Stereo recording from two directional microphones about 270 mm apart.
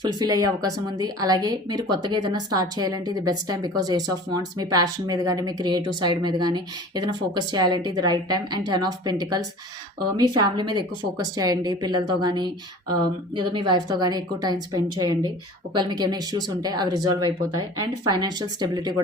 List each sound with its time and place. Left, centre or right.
0.2 s speech: centre